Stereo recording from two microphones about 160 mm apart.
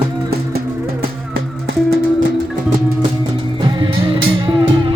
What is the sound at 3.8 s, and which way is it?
Music, 30° right (ahead or behind).